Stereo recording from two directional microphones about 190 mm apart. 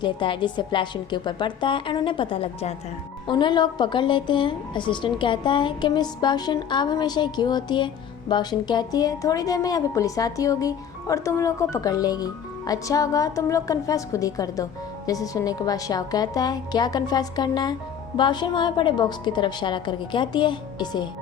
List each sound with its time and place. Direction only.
0.0 s a woman's voice: 25° left (ahead or behind)